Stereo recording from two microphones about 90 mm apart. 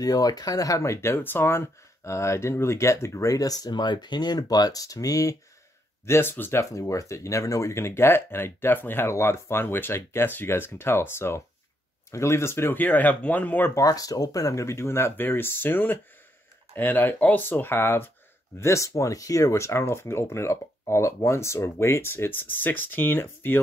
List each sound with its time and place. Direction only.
0.0 s speech: 45° left (ahead or behind)
6.0 s speech: 25° left (ahead or behind)
6.6 s speech: 35° left (ahead or behind); by 13.7 s 20° left (ahead or behind)
13.7 s speech: 40° left (ahead or behind); by 23.6 s 25° left (ahead or behind)